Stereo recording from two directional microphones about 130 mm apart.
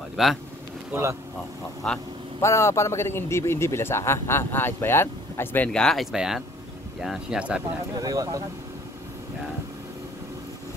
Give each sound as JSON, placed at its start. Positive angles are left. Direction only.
{"t": 0.1, "sound": "speech", "side_deg": 0}
{"t": 2.4, "sound": "a man's voice", "side_deg": 20}
{"t": 5.7, "sound": "speech", "side_deg": 5}
{"t": 7.9, "sound": "speech", "side_deg": -25}